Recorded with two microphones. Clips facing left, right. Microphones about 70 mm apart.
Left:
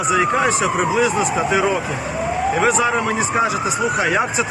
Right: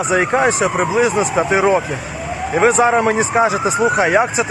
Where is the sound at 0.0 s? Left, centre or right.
Right.